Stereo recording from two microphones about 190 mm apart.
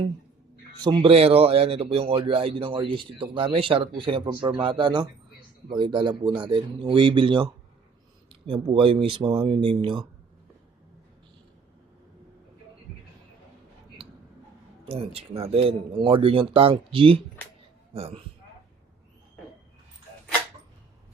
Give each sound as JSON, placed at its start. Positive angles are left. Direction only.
{"t": 0.8, "sound": "speech", "side_deg": -25}
{"t": 14.8, "sound": "a man's voice", "side_deg": -30}